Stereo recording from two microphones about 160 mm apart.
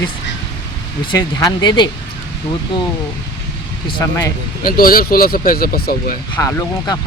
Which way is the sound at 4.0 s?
20° left (ahead or behind).